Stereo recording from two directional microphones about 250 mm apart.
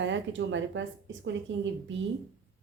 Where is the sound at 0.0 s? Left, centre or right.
Right.